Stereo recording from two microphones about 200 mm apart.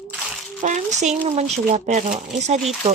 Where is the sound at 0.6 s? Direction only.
40° right (ahead or behind).